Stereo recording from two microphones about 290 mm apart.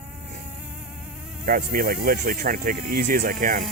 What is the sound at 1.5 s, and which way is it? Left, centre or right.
Speech, right.